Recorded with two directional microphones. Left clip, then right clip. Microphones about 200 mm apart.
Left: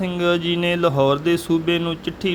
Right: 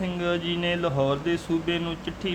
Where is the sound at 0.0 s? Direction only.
30° left (ahead or behind).